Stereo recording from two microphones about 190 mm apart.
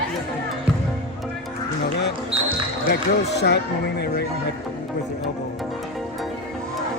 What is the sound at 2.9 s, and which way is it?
Speech, 60° left (ahead or behind).